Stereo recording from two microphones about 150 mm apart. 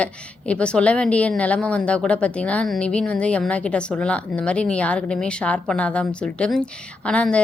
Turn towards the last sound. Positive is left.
turn(degrees=5)  # may be behind; listen again after turning